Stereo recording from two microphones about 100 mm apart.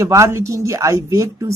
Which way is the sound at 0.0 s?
30° right (ahead or behind).